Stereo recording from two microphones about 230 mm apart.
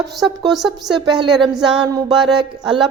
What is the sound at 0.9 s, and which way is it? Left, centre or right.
Speech, centre.